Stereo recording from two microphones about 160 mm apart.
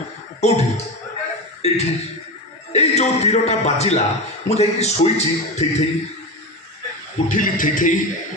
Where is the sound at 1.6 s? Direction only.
40° left (ahead or behind).